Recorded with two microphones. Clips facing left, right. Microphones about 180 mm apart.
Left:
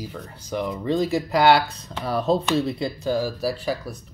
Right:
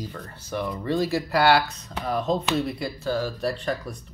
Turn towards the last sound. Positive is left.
turn(degrees=5)  # may be behind; listen again after turning